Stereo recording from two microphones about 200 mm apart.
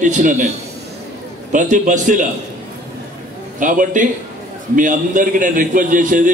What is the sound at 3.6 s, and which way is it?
A man's voice, 40° right (ahead or behind).